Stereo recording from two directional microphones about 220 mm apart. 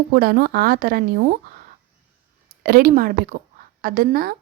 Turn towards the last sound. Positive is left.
turn(degrees=-40)  # may be behind; listen again after turning